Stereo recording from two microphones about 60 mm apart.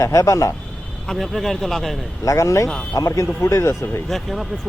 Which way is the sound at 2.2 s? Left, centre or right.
Left.